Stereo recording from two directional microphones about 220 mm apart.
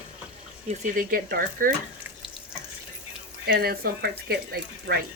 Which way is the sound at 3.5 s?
45° right (ahead or behind).